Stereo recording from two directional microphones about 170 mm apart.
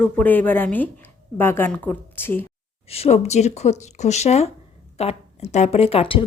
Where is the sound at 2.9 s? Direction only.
40° left (ahead or behind).